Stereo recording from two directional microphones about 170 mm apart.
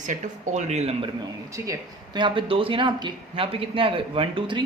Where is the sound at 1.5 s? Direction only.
20° right (ahead or behind).